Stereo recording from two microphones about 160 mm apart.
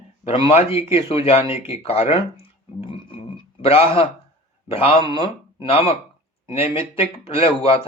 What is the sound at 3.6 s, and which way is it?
Speech, 35° left (ahead or behind).